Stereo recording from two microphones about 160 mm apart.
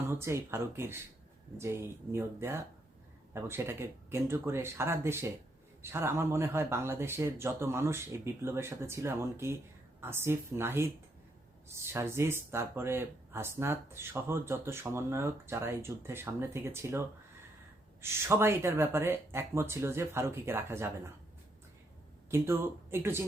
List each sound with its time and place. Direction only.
0.2 s speech: 15° right (ahead or behind)
22.3 s speech: 15° right (ahead or behind)